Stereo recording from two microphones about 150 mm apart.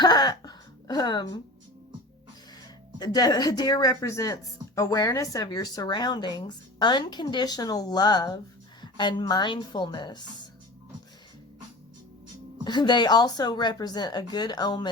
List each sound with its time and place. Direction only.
0.0 s a sound: 30° left (ahead or behind)
3.0 s speech: 25° left (ahead or behind)
12.6 s speech: 30° left (ahead or behind)